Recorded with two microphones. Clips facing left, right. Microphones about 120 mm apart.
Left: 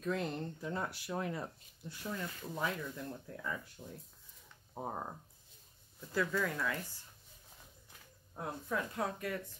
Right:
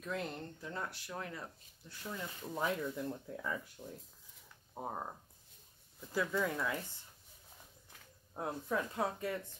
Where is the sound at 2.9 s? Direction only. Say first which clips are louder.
Right 3 dB; 10° right (ahead or behind).